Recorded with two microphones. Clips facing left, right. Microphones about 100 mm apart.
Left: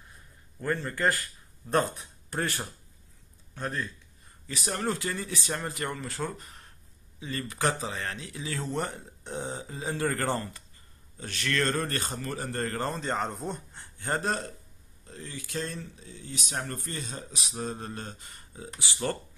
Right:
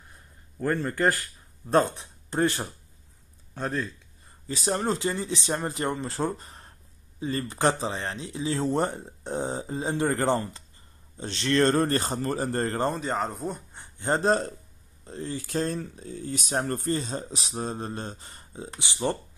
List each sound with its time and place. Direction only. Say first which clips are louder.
1.7 s speech: right 4 dB; 25° right (ahead or behind)
4.5 s speech: right 4 dB; 30° right (ahead or behind)
13.0 s speech: right 2 dB; centre (ahead or behind)
13.7 s speech: right 6 dB; 25° right (ahead or behind)